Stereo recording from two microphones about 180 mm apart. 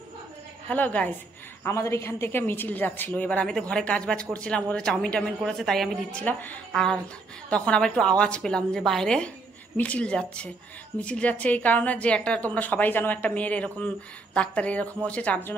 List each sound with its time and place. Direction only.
0.7 s a woman's voice: 10° left (ahead or behind)